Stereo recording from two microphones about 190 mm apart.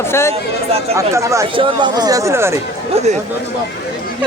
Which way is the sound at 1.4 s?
25° right (ahead or behind).